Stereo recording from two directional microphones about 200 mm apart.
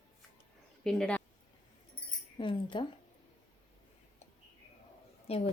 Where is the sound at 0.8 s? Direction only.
5° left (ahead or behind).